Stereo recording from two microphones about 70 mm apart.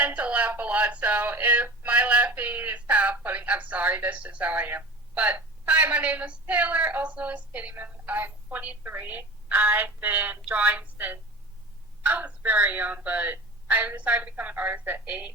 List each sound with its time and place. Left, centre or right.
0.0 s music: centre
5.1 s a woman's voice: right